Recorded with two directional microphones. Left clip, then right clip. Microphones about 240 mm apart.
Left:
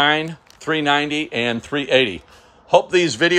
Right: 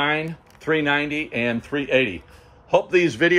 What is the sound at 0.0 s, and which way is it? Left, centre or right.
Speech, centre.